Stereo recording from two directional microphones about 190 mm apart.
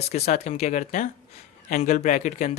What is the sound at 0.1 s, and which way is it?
Speech, 35° left (ahead or behind).